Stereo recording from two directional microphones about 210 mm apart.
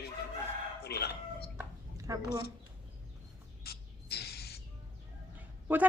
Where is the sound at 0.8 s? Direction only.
50° left (ahead or behind).